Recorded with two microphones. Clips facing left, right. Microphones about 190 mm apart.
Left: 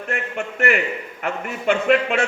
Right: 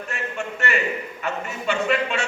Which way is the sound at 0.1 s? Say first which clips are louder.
Left 4 dB; 55° left (ahead or behind).